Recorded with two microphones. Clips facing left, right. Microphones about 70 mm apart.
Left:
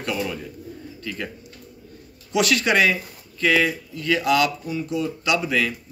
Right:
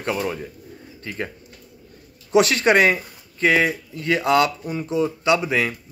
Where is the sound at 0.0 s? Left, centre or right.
Right.